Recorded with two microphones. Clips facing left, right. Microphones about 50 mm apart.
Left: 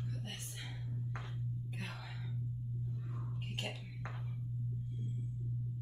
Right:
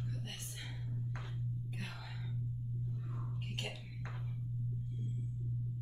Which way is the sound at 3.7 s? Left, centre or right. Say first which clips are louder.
Left 1 dB; centre.